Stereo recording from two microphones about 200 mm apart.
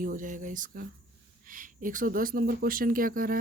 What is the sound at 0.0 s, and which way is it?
Speech, 40° right (ahead or behind).